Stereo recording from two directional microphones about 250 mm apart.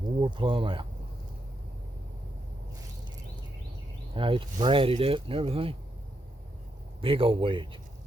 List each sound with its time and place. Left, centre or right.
0.2 s speech: centre
4.1 s speech: right
7.0 s speech: right